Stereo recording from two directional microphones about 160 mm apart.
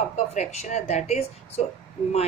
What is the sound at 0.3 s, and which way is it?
A woman's voice, 45° left (ahead or behind).